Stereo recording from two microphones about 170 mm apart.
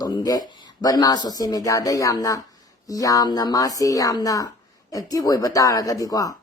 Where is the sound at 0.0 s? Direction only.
25° left (ahead or behind).